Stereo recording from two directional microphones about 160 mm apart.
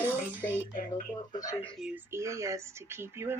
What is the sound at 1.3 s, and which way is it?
Speech, 20° left (ahead or behind).